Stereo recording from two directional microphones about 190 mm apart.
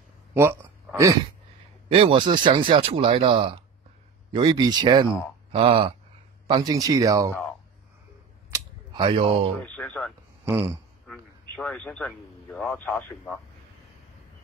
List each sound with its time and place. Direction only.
0.3 s a sound: 10° right (ahead or behind)
1.9 s speech: 25° right (ahead or behind)
8.5 s cap gun: 25° right (ahead or behind)
9.6 s a man's voice: 10° left (ahead or behind)